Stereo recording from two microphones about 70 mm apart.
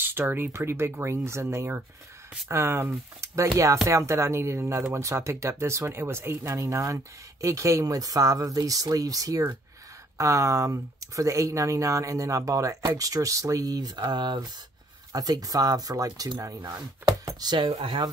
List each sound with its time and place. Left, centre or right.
0.0 s speech: right
15.1 s speech: right
17.4 s speech: right